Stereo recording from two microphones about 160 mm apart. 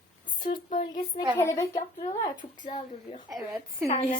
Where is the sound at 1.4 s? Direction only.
15° left (ahead or behind).